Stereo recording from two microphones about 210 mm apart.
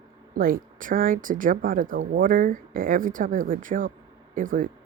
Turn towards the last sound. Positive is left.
turn(degrees=-40)  # may be behind; listen again after turning